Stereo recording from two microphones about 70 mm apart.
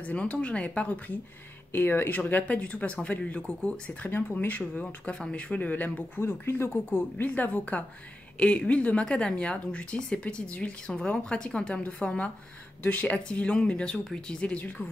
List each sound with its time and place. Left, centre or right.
0.0 s speech: centre
1.7 s speech: left; by 4.1 s centre
4.1 s speech: left
6.2 s speech: left